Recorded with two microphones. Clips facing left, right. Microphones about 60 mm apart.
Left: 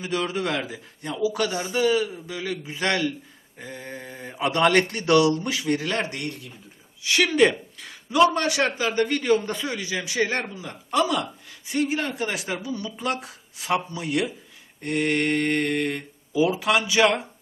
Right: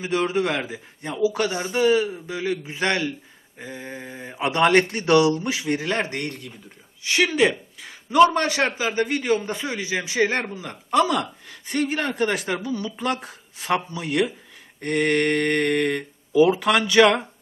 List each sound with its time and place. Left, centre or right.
0.0 s speech: right
6.1 s speech: right
7.3 s speech: centre
8.1 s speech: right
8.8 s a man's voice: centre
9.6 s speech: right
11.2 s speech: right
12.6 s speech: right
14.8 s a sound: right
16.4 s speech: right